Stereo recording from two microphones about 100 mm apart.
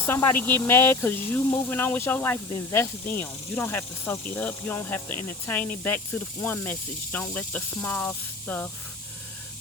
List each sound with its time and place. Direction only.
0.0 s speech: 25° left (ahead or behind)
2.5 s speech: 35° left (ahead or behind); by 8.7 s 15° left (ahead or behind)